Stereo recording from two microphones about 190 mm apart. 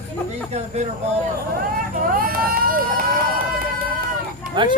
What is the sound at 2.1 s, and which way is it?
Vehicle, 50° right (ahead or behind).